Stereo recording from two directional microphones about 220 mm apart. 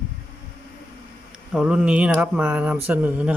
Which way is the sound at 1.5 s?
5° right (ahead or behind).